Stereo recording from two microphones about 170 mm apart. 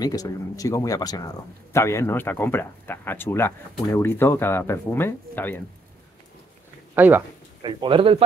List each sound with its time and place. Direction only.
0.0 s speech: 20° left (ahead or behind)
7.0 s speech: 10° right (ahead or behind)
7.6 s a man's voice: 30° right (ahead or behind)